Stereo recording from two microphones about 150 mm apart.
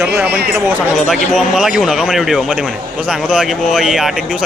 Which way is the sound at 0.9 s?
5° right (ahead or behind).